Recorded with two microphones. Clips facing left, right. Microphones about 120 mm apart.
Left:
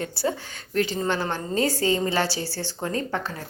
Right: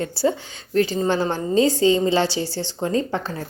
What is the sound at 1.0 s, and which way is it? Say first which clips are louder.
A woman's voice: right 5 dB; 25° right (ahead or behind).